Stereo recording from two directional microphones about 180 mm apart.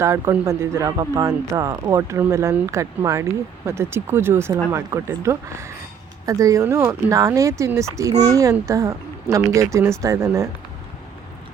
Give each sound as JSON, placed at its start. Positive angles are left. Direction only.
{"t": 0.0, "sound": "speech", "side_deg": -15}